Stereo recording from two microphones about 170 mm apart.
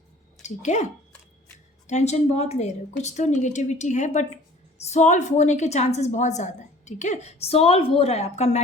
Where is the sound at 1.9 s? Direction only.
40° left (ahead or behind).